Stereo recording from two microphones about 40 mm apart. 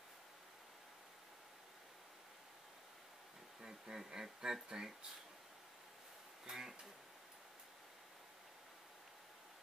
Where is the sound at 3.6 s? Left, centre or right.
Centre.